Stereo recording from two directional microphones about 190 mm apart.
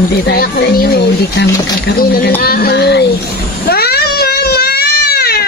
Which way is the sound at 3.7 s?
55° left (ahead or behind).